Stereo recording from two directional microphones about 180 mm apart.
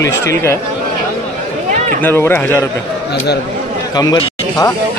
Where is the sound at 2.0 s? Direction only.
10° left (ahead or behind).